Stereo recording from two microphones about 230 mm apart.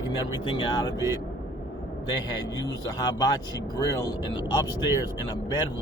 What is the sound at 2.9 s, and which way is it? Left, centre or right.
Speech, centre.